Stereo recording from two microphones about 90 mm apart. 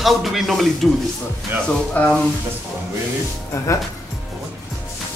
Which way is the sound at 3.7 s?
35° left (ahead or behind).